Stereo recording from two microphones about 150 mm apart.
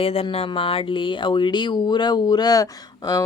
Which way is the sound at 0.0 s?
40° left (ahead or behind).